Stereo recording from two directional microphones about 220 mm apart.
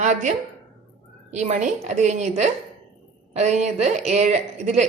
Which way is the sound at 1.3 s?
30° right (ahead or behind).